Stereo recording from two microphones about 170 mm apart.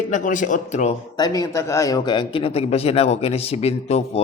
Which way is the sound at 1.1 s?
20° left (ahead or behind).